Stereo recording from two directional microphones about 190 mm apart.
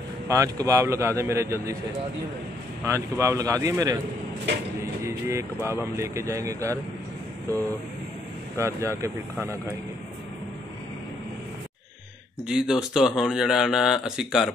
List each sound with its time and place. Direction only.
0.3 s speech: 15° right (ahead or behind)
2.8 s speech: 15° right (ahead or behind)
5.0 s speech: 15° right (ahead or behind)
8.5 s speech: 15° right (ahead or behind)
12.4 s speech: 5° right (ahead or behind)